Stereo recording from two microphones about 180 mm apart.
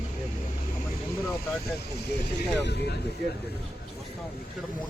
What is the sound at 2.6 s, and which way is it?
Speech, 65° left (ahead or behind).